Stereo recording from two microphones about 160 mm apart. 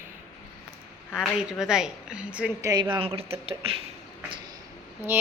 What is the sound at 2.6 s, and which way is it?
Speech, 25° right (ahead or behind).